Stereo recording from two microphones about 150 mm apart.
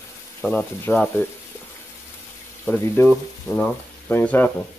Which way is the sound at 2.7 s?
15° left (ahead or behind).